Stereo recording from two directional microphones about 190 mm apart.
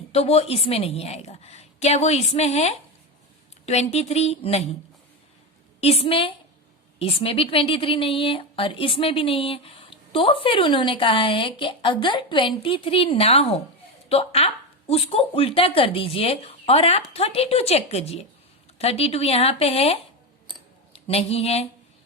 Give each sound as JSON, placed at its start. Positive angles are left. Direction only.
{"t": 0.1, "sound": "speech", "side_deg": 35}
{"t": 5.8, "sound": "a woman's voice", "side_deg": 30}